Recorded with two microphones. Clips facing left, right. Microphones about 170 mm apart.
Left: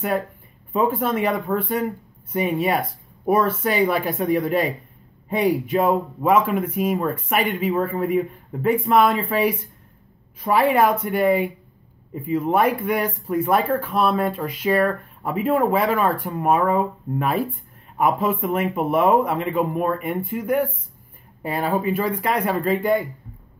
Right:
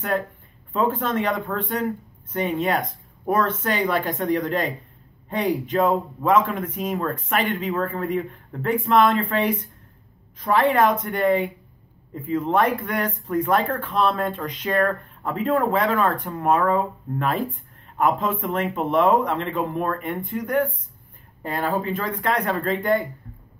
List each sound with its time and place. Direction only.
0.7 s speech: 10° left (ahead or behind)